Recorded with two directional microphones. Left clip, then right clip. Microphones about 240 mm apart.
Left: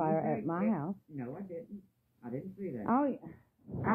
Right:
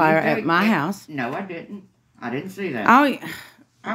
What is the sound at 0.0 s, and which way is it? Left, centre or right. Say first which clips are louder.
Speech: right 14 dB; right.